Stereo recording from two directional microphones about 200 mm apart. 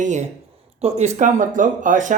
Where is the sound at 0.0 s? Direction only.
35° right (ahead or behind).